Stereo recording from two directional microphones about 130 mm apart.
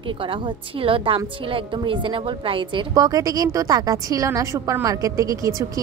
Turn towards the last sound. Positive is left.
turn(degrees=-25)  # may be behind; listen again after turning